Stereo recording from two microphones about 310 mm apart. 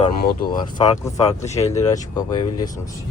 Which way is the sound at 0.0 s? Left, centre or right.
Left.